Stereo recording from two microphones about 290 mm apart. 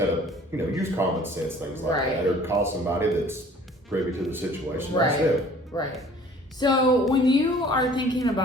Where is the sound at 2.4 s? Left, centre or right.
Centre.